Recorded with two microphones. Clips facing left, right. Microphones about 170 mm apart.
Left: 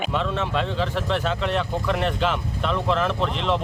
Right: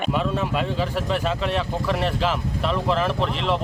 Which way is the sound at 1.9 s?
Centre (ahead or behind).